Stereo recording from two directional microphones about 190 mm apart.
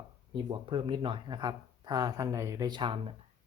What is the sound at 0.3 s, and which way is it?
Speech, 25° right (ahead or behind).